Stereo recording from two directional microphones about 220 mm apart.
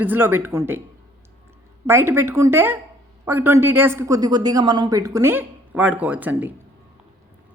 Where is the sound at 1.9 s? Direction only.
10° right (ahead or behind).